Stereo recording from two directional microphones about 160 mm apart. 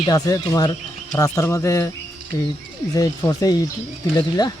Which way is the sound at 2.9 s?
25° left (ahead or behind).